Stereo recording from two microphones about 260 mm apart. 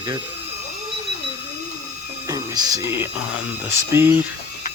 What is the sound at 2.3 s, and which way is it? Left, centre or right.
Speech, centre.